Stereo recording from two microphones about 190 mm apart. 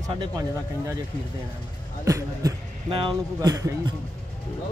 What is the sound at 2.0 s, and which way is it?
Speech, 20° right (ahead or behind).